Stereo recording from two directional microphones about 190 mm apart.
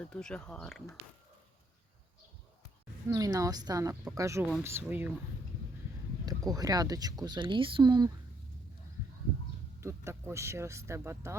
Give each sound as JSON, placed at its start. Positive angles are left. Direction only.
{"t": 0.0, "sound": "speech", "side_deg": 5}
{"t": 3.1, "sound": "speech", "side_deg": -20}
{"t": 6.2, "sound": "speech", "side_deg": -20}
{"t": 9.8, "sound": "speech", "side_deg": -15}